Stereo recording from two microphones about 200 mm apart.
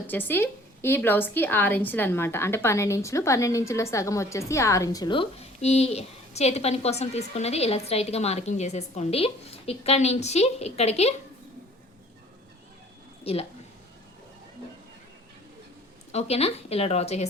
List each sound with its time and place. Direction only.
0.1 s a woman's voice: 10° left (ahead or behind); by 11.1 s 30° left (ahead or behind)
13.3 s a woman's voice: 30° left (ahead or behind)
16.1 s speech: 30° left (ahead or behind)